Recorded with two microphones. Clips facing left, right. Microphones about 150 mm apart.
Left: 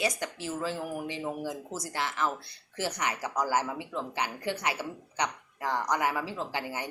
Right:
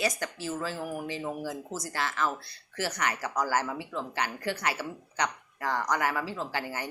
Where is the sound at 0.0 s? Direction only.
20° left (ahead or behind).